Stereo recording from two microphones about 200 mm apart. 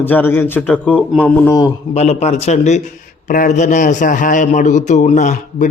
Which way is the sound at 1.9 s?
35° left (ahead or behind).